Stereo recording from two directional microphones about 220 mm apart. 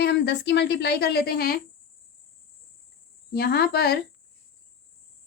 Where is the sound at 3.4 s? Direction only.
45° left (ahead or behind).